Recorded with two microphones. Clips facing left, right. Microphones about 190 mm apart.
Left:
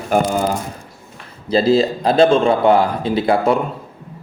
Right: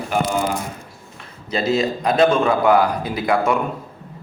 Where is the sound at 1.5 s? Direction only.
30° left (ahead or behind).